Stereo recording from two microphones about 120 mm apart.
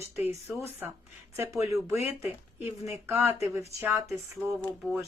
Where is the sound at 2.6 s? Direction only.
20° right (ahead or behind).